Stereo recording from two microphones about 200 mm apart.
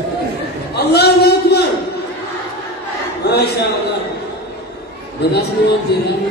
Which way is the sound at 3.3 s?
55° left (ahead or behind).